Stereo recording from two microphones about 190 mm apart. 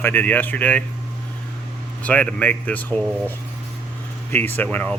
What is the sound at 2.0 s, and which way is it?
Speech, 5° left (ahead or behind).